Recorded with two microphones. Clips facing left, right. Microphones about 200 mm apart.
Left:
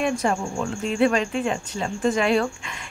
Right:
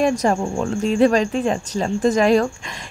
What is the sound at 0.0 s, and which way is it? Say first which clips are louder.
A woman's voice: right 5 dB; 40° right (ahead or behind).